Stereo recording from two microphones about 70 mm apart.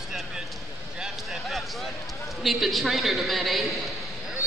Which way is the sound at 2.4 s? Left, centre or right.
Centre.